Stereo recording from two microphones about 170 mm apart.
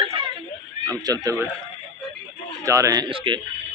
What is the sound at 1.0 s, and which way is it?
Speech, 20° right (ahead or behind).